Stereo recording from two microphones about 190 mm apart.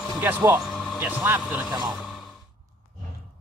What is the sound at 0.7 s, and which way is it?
Music, centre (ahead or behind).